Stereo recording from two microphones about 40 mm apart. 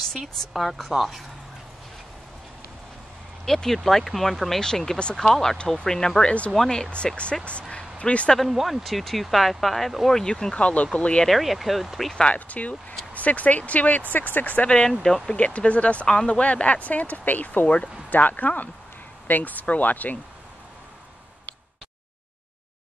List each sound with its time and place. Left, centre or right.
0.2 s speech: centre
3.4 s speech: centre
6.2 s speech: left
6.5 s speech: centre
7.7 s a sound: left
8.5 s speech: centre
10.2 s speech: left
11.2 s speech: centre
12.4 s speech: left
14.9 s speech: centre
15.3 s speech: left